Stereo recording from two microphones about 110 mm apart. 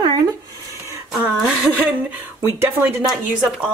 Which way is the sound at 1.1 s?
10° right (ahead or behind).